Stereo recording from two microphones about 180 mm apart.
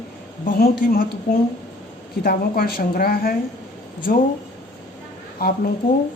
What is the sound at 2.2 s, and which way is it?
A woman's voice, 55° left (ahead or behind).